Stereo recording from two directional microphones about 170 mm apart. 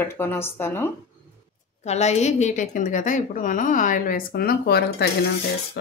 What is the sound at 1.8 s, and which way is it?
A woman's voice, 40° left (ahead or behind).